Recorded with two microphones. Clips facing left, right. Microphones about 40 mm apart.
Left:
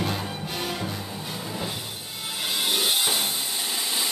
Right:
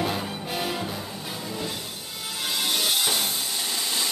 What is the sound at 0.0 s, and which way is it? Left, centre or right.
Music, centre.